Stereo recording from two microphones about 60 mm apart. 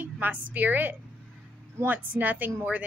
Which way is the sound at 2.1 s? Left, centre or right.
Right.